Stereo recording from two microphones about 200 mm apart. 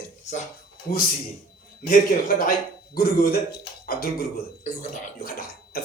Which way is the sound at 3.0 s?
50° left (ahead or behind).